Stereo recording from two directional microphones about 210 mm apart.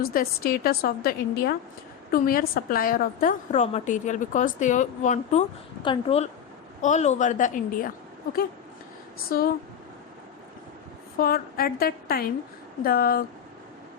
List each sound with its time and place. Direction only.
0.0 s a woman's voice: 45° left (ahead or behind)
9.3 s a woman's voice: 45° left (ahead or behind)
11.2 s a woman's voice: 45° left (ahead or behind)